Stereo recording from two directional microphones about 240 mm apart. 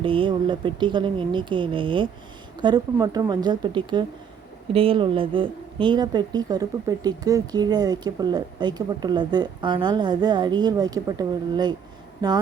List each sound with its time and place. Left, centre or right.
0.0 s speech: right